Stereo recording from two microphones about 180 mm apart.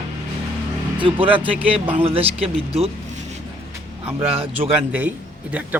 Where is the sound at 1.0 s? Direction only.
30° right (ahead or behind).